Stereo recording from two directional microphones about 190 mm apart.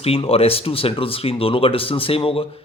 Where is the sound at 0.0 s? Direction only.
30° left (ahead or behind).